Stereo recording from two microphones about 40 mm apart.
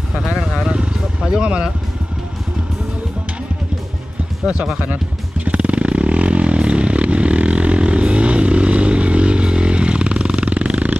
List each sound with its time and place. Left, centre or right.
0.7 s vehicle: right
1.3 s music: right
4.5 s speech: centre
5.4 s vehicle: right